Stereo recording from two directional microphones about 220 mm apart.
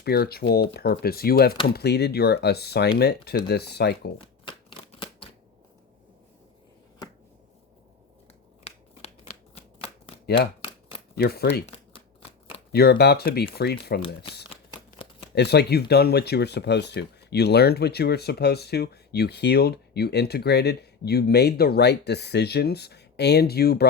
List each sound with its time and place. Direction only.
0.0 s speech: 45° left (ahead or behind)
4.2 s shuffling cards: 25° left (ahead or behind)
7.0 s finger snapping: 15° left (ahead or behind)
8.6 s shuffling cards: 30° left (ahead or behind)
11.2 s speech: 45° left (ahead or behind)
12.7 s speech: 45° left (ahead or behind)
14.5 s a sound: 20° left (ahead or behind)
15.4 s speech: 50° left (ahead or behind)